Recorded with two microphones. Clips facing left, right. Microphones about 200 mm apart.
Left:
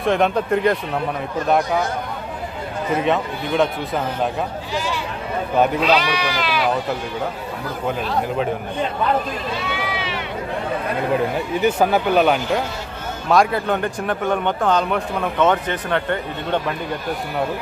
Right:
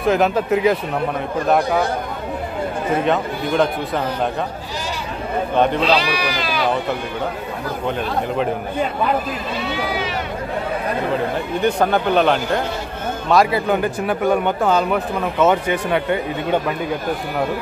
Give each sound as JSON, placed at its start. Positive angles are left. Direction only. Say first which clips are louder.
{"t": 0.0, "sound": "speech", "louder": "right 1 dB", "side_deg": -5}
{"t": 3.0, "sound": "speech", "louder": "even", "side_deg": 0}
{"t": 5.8, "sound": "speech", "louder": "even", "side_deg": -30}
{"t": 9.8, "sound": "sheep", "louder": "right 3 dB", "side_deg": -40}
{"t": 11.6, "sound": "speech", "louder": "even", "side_deg": 5}